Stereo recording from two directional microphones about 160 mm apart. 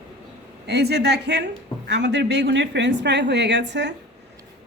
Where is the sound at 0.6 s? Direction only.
90° right.